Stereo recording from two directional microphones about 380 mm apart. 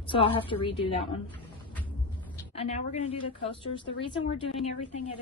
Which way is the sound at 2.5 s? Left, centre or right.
Centre.